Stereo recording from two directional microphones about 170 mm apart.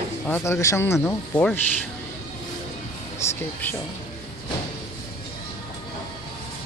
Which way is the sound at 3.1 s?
15° left (ahead or behind).